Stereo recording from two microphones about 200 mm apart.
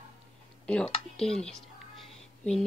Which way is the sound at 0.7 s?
5° left (ahead or behind).